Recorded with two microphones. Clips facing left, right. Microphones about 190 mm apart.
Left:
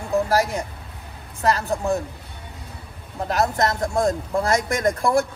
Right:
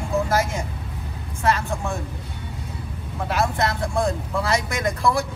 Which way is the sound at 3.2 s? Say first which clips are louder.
Left 2 dB; 40° left (ahead or behind).